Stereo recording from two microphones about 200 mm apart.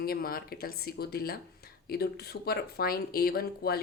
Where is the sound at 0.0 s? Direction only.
50° left (ahead or behind).